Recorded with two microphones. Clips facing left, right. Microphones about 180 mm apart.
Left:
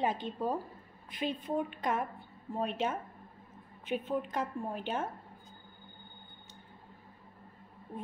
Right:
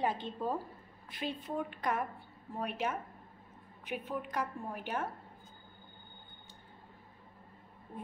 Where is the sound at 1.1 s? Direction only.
20° left (ahead or behind).